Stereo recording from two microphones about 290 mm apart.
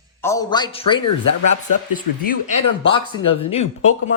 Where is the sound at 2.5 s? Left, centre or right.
Centre.